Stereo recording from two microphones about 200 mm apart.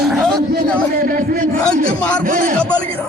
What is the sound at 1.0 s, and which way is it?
Speech, 45° right (ahead or behind).